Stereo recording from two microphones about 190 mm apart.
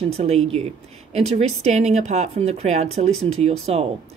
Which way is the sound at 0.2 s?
35° right (ahead or behind).